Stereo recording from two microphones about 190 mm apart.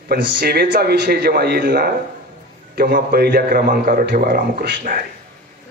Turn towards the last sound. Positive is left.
turn(degrees=-45)  # may be behind; listen again after turning